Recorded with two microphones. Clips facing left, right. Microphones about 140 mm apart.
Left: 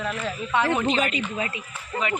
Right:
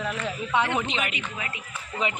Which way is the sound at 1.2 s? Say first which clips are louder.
Left 6 dB; 30° left (ahead or behind).